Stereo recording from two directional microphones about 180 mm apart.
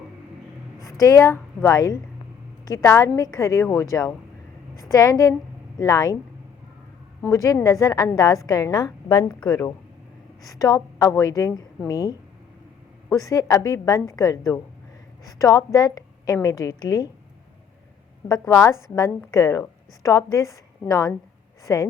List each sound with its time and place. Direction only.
0.9 s a woman's voice: 20° left (ahead or behind)
7.3 s a woman's voice: 20° left (ahead or behind)
18.3 s a woman's voice: 15° left (ahead or behind)